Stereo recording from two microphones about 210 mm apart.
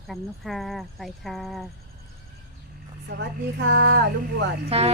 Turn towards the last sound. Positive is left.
turn(degrees=-30)  # may be behind; listen again after turning